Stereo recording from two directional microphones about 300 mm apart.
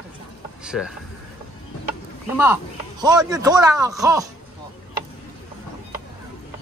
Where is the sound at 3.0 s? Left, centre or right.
Centre.